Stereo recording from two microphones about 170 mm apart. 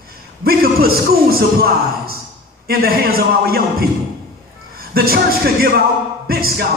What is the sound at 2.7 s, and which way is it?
Speech, 60° right (ahead or behind).